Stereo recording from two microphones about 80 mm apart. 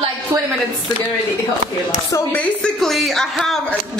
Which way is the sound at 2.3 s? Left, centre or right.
Centre.